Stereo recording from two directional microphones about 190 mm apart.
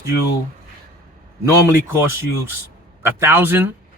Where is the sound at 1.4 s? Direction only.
15° right (ahead or behind).